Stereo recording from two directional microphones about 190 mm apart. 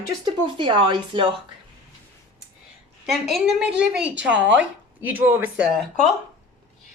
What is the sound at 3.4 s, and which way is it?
Speech, 5° right (ahead or behind).